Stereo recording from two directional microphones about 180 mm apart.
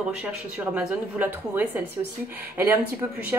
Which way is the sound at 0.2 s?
5° right (ahead or behind).